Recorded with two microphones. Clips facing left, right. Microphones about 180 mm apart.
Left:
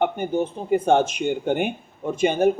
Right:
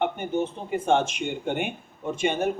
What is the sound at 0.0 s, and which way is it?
Speech, 40° left (ahead or behind).